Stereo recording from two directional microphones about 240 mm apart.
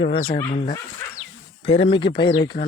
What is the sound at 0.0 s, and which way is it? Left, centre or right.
Speech, left.